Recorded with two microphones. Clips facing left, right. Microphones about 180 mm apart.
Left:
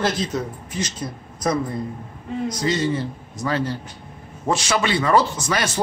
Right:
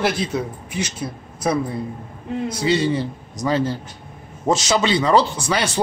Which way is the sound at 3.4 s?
25° right (ahead or behind).